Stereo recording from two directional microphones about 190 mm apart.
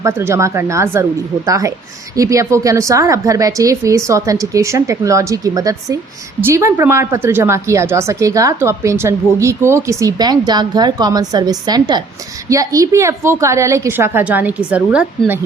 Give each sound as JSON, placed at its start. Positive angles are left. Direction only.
{"t": 0.0, "sound": "a woman's voice", "side_deg": -15}